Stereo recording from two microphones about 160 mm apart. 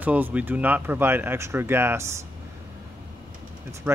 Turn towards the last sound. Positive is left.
turn(degrees=-10)  # may be behind; listen again after turning